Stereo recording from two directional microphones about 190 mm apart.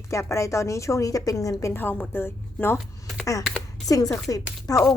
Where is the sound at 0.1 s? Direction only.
15° left (ahead or behind).